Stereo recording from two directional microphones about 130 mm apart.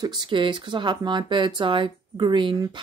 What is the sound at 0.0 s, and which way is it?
Speech, 40° right (ahead or behind).